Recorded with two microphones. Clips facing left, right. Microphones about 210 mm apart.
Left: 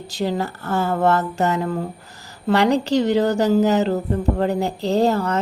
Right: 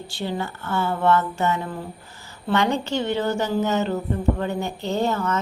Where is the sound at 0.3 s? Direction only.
40° left (ahead or behind).